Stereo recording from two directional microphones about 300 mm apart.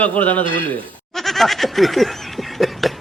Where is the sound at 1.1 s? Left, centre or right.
Centre.